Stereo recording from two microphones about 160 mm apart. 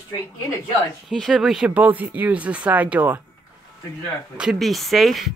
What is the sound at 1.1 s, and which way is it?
Speech, centre (ahead or behind).